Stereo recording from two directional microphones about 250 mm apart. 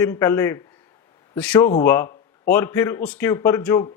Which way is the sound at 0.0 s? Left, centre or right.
Centre.